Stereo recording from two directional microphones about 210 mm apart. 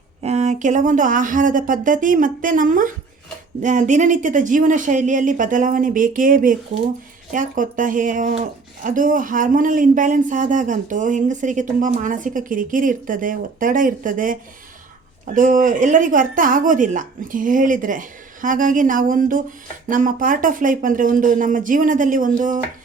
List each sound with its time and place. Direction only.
0.2 s speech: 30° right (ahead or behind)
15.4 s speech: 40° right (ahead or behind)